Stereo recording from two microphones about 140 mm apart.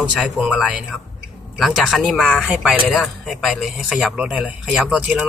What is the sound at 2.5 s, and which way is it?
Speech, 10° right (ahead or behind).